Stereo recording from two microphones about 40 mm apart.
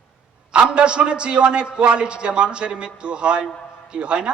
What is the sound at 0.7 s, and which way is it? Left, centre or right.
A man's voice, right.